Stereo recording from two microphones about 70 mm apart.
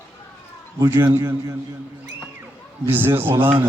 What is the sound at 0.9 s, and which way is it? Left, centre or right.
Speech, right.